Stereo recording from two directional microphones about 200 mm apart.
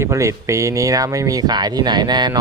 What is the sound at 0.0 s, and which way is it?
Speech, 15° right (ahead or behind).